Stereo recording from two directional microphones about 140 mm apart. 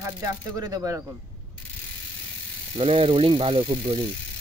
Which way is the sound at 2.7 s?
45° right (ahead or behind).